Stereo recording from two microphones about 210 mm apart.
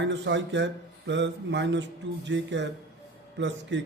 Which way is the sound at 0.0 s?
60° right (ahead or behind).